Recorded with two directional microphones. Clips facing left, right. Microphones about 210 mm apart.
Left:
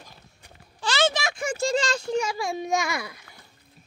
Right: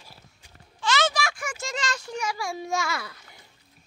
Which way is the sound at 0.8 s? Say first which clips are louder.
Left 1 dB; 30° left (ahead or behind).